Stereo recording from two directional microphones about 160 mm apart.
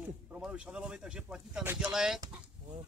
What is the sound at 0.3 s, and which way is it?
Speech, 5° right (ahead or behind).